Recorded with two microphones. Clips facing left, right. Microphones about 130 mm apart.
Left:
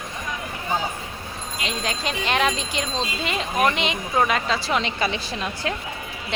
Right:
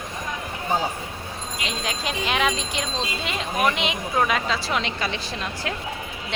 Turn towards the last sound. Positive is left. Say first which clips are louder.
# left 2 dB
turn(degrees=0)  # may be behind; listen again after turning